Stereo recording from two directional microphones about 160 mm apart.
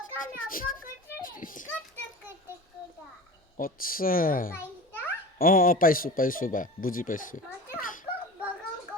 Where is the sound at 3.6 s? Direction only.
60° left (ahead or behind).